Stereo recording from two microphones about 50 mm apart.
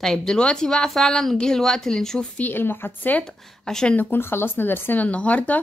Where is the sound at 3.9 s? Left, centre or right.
Left.